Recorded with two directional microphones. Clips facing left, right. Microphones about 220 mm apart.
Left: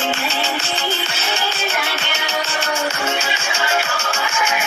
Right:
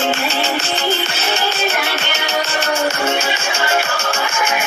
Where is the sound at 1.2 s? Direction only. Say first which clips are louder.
Right 3 dB; 65° right (ahead or behind).